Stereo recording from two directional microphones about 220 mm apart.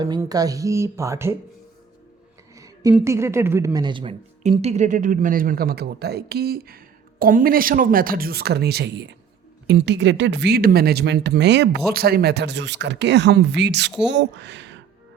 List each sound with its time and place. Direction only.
0.0 s speech: 15° right (ahead or behind)
2.6 s a sound: 15° right (ahead or behind)
2.9 s a woman's voice: 10° right (ahead or behind); by 14.8 s 55° right (ahead or behind)